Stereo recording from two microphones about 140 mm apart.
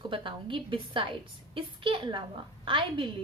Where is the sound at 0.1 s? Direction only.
35° right (ahead or behind).